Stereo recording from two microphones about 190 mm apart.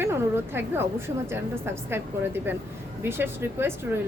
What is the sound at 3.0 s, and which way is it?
Speech, 10° right (ahead or behind).